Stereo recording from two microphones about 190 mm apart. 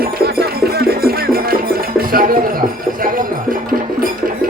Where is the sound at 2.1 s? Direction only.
50° right (ahead or behind).